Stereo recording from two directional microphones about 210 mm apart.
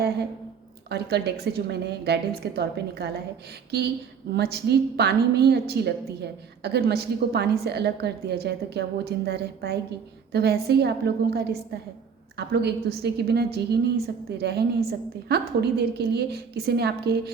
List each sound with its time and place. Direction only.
0.9 s a woman's voice: 50° right (ahead or behind)
4.4 s a woman's voice: 50° right (ahead or behind)